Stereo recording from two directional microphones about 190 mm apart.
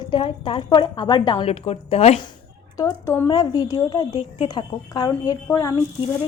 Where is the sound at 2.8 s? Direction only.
15° left (ahead or behind).